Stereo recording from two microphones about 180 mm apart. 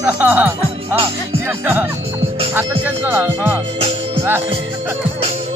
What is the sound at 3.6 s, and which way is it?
Music, 35° right (ahead or behind).